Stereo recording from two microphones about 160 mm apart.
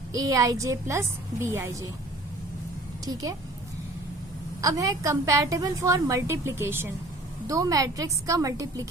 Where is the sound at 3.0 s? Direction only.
20° right (ahead or behind).